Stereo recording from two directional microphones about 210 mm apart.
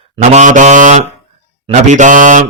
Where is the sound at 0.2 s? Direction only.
35° right (ahead or behind).